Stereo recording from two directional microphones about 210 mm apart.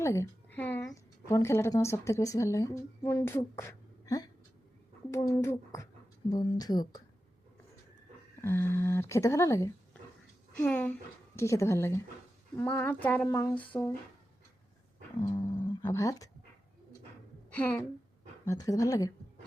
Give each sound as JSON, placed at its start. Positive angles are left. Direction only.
{"t": 0.0, "sound": "a sound", "side_deg": 15}
{"t": 1.3, "sound": "a woman's voice", "side_deg": 10}
{"t": 8.4, "sound": "a woman's voice", "side_deg": 10}
{"t": 15.2, "sound": "a woman's voice", "side_deg": 20}
{"t": 17.5, "sound": "a woman's voice", "side_deg": 5}